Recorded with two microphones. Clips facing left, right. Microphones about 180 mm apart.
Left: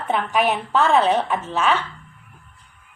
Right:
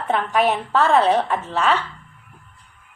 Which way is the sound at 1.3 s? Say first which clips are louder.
Even; 20° left (ahead or behind).